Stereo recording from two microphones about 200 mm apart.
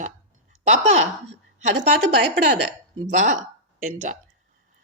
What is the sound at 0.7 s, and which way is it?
Speech, 35° right (ahead or behind).